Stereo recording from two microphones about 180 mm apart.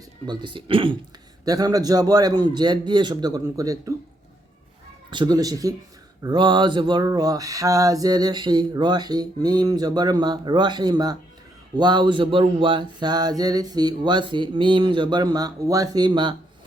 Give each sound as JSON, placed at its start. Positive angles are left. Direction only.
{"t": 0.3, "sound": "mantra", "side_deg": -25}
{"t": 5.1, "sound": "mantra", "side_deg": -25}